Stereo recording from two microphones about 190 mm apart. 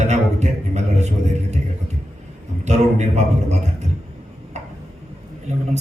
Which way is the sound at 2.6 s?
35° right (ahead or behind).